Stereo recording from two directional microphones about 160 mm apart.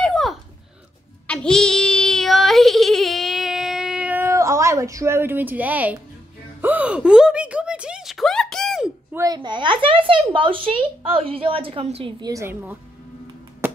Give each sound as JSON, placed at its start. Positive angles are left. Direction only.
{"t": 0.0, "sound": "a sound", "side_deg": 5}
{"t": 1.2, "sound": "child singing", "side_deg": 5}
{"t": 6.6, "sound": "speech", "side_deg": -10}
{"t": 9.1, "sound": "a child's voice", "side_deg": -25}
{"t": 12.2, "sound": "a child's voice", "side_deg": -20}